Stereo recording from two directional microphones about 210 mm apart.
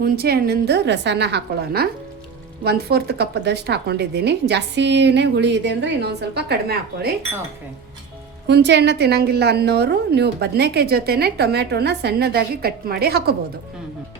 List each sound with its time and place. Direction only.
0.0 s a woman's voice: 45° right (ahead or behind)
8.4 s a woman's voice: 55° right (ahead or behind)